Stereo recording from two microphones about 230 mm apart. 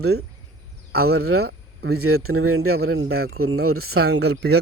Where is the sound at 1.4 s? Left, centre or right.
Right.